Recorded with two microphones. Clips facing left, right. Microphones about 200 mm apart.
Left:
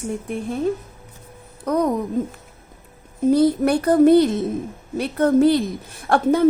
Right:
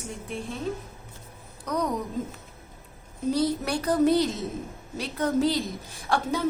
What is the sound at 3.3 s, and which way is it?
A woman's voice, 55° left (ahead or behind).